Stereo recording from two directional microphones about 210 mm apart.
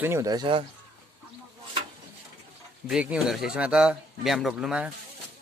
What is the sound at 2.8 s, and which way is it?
Speech, 5° right (ahead or behind).